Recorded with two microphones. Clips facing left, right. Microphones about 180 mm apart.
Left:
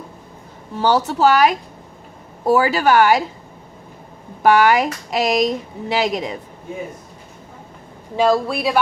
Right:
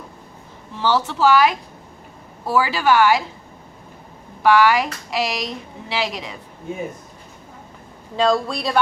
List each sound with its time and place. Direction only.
0.8 s speech: 40° left (ahead or behind)
4.4 s speech: 45° left (ahead or behind)
8.1 s speech: 10° left (ahead or behind)